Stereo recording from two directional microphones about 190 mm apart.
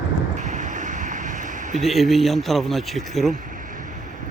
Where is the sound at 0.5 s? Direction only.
40° right (ahead or behind).